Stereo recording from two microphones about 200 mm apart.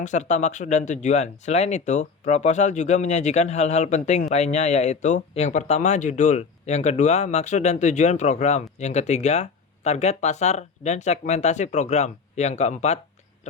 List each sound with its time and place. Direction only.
0.0 s speech: 35° left (ahead or behind)